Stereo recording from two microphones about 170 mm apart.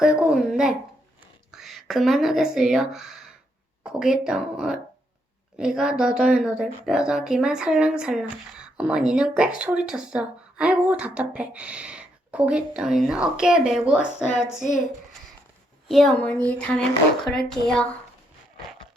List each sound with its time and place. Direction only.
0.0 s a sound: 5° right (ahead or behind)
1.5 s a woman's voice: centre (ahead or behind)
15.9 s a woman's voice: centre (ahead or behind)